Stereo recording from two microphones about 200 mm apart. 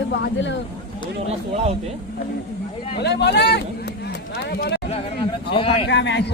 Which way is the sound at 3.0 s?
55° left (ahead or behind).